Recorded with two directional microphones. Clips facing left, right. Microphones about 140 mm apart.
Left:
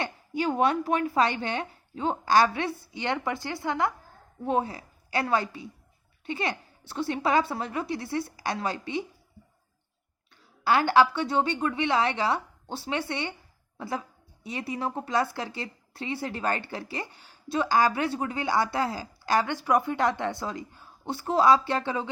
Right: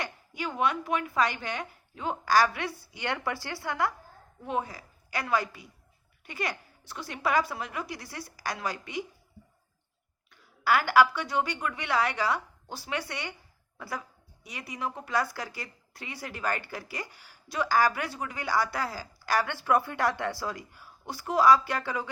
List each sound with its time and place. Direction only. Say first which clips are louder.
0.0 s speech: left 7 dB; 30° left (ahead or behind)
4.4 s a woman's voice: left 5 dB; 30° left (ahead or behind)
10.6 s a woman's voice: left 2 dB; 25° left (ahead or behind)